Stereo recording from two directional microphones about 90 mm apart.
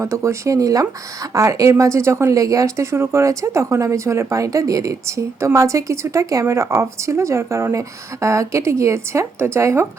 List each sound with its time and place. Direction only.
0.0 s speech: 35° right (ahead or behind)